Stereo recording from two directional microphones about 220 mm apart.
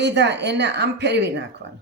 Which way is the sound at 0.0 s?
50° right (ahead or behind).